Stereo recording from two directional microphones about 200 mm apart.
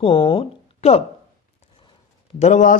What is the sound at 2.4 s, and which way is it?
Speech, 40° left (ahead or behind).